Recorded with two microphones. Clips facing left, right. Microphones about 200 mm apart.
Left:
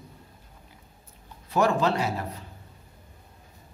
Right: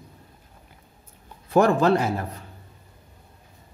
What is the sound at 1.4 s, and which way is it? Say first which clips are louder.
Speech: right 5 dB; 50° right (ahead or behind).